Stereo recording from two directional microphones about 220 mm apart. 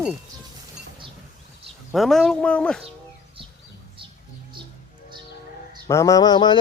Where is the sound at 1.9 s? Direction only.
Centre (ahead or behind).